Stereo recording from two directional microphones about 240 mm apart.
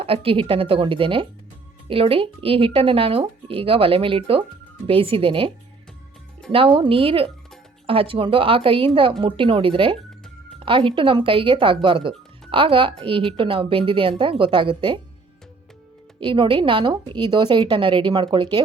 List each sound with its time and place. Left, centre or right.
0.0 s speech: right
6.5 s speech: right
16.2 s speech: right